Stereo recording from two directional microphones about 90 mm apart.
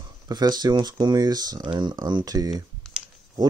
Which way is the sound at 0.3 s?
50° right (ahead or behind).